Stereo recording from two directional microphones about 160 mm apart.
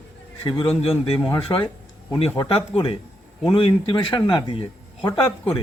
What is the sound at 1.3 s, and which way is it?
Speech, 25° left (ahead or behind).